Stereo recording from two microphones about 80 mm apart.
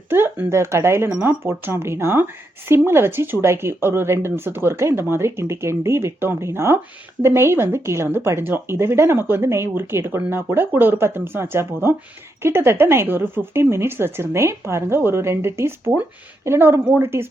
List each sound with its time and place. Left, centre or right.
0.1 s speech: right